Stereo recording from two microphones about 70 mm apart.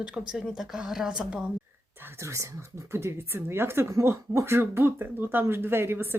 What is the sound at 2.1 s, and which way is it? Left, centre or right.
A woman's voice, right.